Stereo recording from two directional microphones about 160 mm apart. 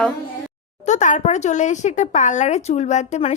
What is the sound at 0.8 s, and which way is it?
Speech, 50° left (ahead or behind).